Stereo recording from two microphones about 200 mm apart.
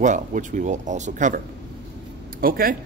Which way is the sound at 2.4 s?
45° right (ahead or behind).